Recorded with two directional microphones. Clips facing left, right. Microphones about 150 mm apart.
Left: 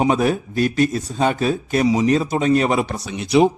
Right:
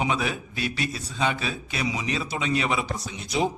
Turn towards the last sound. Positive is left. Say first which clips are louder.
# left 11 dB
turn(degrees=70)  # may be behind; listen again after turning